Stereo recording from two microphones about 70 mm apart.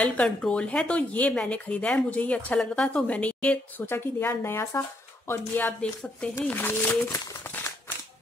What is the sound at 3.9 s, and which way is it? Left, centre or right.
Speech, left.